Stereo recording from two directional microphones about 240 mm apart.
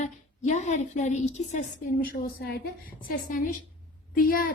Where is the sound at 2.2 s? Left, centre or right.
Left.